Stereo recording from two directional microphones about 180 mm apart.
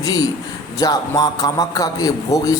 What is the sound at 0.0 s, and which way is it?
A man's voice, 20° left (ahead or behind).